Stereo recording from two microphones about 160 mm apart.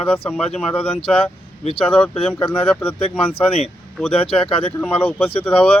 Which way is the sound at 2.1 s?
35° left (ahead or behind).